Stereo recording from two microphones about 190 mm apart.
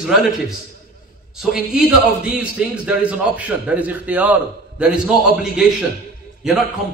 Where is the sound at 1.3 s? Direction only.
Centre (ahead or behind).